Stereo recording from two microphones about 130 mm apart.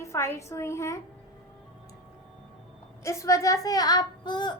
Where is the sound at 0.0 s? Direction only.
20° left (ahead or behind).